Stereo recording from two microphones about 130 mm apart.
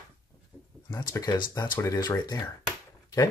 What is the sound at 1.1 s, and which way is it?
Speech, 30° left (ahead or behind).